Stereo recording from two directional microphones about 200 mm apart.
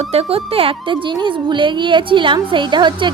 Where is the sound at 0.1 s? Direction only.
30° right (ahead or behind).